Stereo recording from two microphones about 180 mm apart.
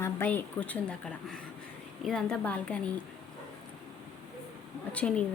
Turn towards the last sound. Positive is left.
turn(degrees=5)  # may be behind; listen again after turning